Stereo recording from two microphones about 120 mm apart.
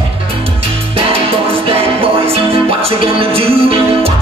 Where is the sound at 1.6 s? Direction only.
55° right (ahead or behind).